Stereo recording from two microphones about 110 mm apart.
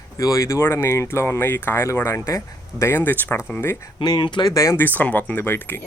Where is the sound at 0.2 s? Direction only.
30° left (ahead or behind).